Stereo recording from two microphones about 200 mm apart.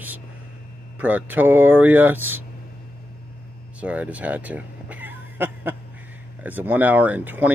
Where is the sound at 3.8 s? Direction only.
5° right (ahead or behind).